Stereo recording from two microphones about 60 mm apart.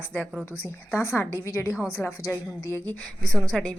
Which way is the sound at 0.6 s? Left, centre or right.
Left.